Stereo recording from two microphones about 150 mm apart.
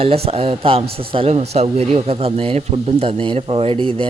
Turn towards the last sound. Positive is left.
turn(degrees=-35)  # may be behind; listen again after turning